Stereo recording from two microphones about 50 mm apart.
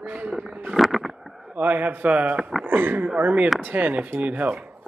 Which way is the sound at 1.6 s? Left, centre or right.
Right.